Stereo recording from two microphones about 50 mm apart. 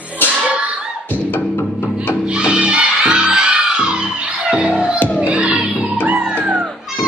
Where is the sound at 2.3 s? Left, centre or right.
Centre.